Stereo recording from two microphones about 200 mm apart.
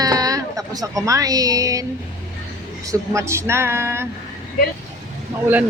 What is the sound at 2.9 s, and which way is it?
A woman's voice, 15° right (ahead or behind).